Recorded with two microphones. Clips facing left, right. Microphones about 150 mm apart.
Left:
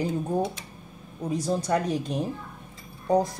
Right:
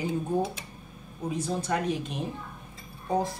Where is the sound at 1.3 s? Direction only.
35° left (ahead or behind).